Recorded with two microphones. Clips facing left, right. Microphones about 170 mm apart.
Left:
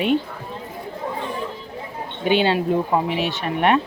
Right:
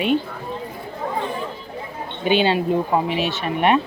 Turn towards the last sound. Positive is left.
turn(degrees=-15)  # may be behind; listen again after turning